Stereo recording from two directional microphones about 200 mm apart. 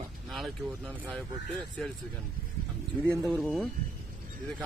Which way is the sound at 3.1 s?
Centre (ahead or behind).